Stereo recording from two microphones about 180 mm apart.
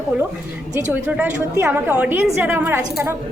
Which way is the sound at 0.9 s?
10° right (ahead or behind).